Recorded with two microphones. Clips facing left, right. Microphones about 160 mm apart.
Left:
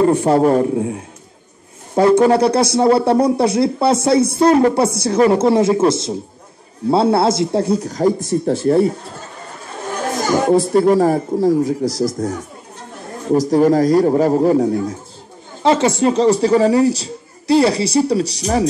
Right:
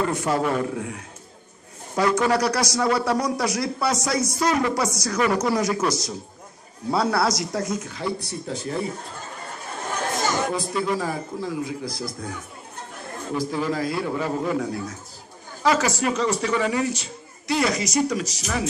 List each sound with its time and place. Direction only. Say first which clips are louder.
0.0 s a man's voice: left 10 dB; 35° left (ahead or behind)
10.7 s speech: left 12 dB; 45° left (ahead or behind)